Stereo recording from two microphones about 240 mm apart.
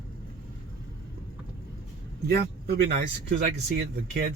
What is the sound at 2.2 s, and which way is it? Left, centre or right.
A man's voice, right.